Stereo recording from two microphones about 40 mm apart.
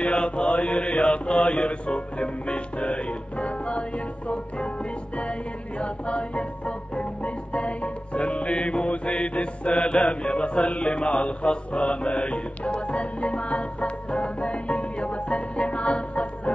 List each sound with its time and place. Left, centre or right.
0.0 s mantra: left
5.8 s music: left